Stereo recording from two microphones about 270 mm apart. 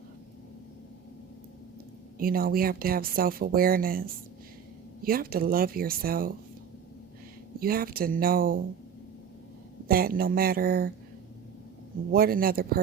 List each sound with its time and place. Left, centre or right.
2.1 s speech: right
7.6 s speech: right
9.9 s speech: right
12.1 s speech: right